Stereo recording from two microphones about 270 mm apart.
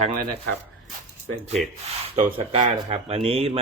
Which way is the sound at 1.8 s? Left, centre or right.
Right.